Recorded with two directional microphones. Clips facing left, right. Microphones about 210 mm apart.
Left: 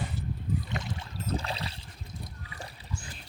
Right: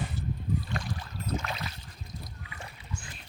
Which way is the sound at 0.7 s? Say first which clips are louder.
Even; 20° left (ahead or behind).